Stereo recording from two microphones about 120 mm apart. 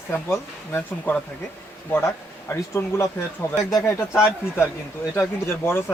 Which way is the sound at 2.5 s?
20° left (ahead or behind).